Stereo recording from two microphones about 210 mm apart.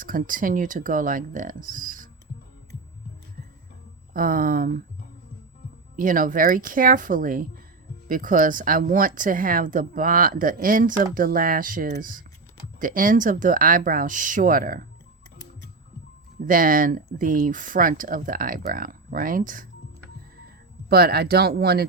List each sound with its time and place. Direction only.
0.0 s speech: 40° right (ahead or behind)
4.1 s speech: 40° right (ahead or behind)
6.0 s speech: 40° right (ahead or behind)
16.5 s speech: 40° right (ahead or behind)
20.9 s speech: 50° right (ahead or behind)